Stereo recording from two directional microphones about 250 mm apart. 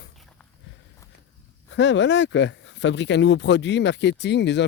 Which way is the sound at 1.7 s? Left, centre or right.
Left.